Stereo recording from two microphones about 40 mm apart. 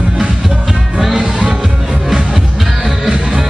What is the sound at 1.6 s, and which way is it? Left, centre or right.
Music, centre.